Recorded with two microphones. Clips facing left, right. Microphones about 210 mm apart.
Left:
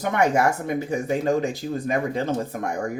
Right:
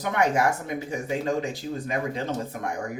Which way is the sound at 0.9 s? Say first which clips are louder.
Left 4 dB; 45° left (ahead or behind).